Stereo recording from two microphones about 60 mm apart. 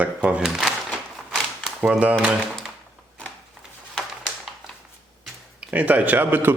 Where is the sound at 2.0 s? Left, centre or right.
Right.